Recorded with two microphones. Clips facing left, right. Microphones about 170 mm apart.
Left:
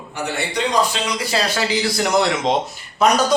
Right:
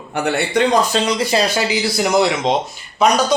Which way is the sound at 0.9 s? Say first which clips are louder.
Right 6 dB; 30° right (ahead or behind).